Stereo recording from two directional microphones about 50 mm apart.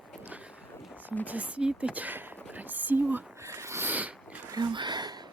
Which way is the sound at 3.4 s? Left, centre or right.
Right.